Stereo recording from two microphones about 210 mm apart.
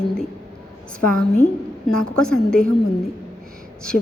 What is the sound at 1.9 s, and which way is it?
Speech, 5° left (ahead or behind).